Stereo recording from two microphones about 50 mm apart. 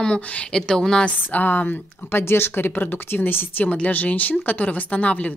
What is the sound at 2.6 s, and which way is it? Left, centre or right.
Speech, left.